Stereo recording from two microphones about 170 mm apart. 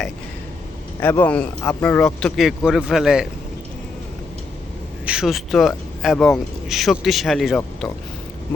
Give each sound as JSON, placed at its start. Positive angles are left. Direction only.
{"t": 1.0, "sound": "speech", "side_deg": 10}
{"t": 5.0, "sound": "speech", "side_deg": -5}